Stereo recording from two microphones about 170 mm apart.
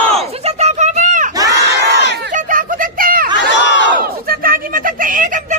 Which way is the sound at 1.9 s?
80° right.